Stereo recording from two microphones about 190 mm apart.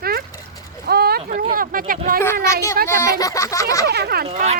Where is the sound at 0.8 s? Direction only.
55° right (ahead or behind).